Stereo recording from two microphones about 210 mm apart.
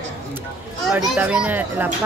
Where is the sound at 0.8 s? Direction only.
Centre (ahead or behind).